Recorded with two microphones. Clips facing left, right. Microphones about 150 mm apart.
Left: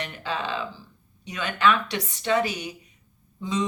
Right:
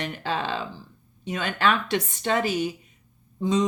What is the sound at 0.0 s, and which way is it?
Speech, 45° right (ahead or behind).